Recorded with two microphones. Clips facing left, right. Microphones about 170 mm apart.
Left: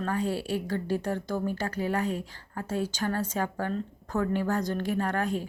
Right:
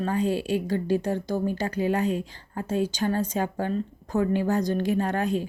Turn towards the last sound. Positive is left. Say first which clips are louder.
# right 3 dB
turn(degrees=-20)  # may be behind; listen again after turning